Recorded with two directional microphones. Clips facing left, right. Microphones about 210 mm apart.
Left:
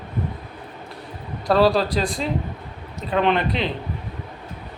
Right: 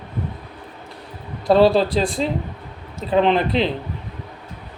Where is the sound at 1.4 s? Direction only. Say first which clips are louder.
Right 3 dB; 25° right (ahead or behind).